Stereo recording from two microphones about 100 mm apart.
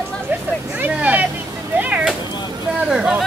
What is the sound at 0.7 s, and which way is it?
Vehicle, 15° right (ahead or behind).